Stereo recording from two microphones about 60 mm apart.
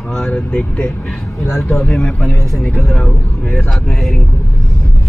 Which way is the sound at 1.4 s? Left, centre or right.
Left.